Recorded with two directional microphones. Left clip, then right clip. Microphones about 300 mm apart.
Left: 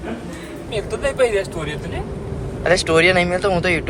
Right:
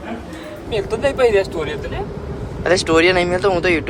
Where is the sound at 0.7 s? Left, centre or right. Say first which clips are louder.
Right 3 dB; right.